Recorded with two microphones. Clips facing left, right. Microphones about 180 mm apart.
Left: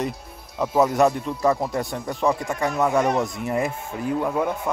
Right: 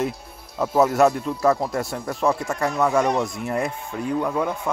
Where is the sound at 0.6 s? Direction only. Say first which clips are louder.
Right 1 dB; 5° right (ahead or behind).